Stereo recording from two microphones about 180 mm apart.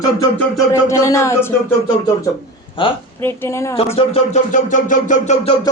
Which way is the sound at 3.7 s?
35° left (ahead or behind).